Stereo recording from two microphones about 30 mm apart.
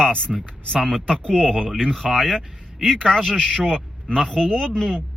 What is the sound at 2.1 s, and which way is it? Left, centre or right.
Speech, centre.